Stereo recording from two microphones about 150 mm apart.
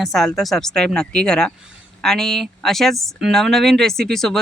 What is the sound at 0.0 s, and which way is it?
Speech, centre (ahead or behind).